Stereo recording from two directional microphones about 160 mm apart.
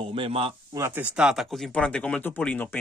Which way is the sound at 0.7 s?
15° right (ahead or behind).